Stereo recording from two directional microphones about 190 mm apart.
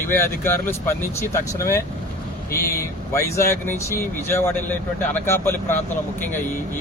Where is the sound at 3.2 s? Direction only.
15° left (ahead or behind).